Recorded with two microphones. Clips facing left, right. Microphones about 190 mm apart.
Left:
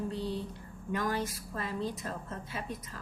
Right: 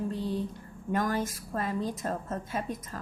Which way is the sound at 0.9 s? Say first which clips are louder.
Right 4 dB; 45° right (ahead or behind).